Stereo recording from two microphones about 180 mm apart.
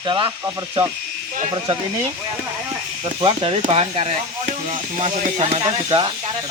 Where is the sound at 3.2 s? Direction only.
30° right (ahead or behind).